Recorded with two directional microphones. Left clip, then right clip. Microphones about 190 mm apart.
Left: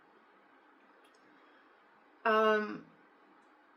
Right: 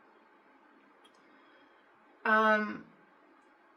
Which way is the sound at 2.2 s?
15° right (ahead or behind).